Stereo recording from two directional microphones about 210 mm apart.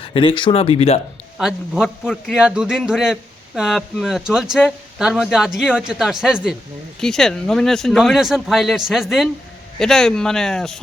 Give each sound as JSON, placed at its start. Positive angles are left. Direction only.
{"t": 0.0, "sound": "speech", "side_deg": 25}
{"t": 1.4, "sound": "a man's voice", "side_deg": 0}